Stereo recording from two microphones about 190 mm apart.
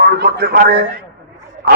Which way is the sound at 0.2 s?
55° right (ahead or behind).